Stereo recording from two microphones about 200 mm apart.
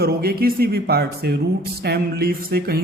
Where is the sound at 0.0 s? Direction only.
50° right (ahead or behind).